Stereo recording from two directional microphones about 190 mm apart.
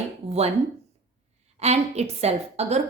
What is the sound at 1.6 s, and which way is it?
A woman's voice, 35° right (ahead or behind).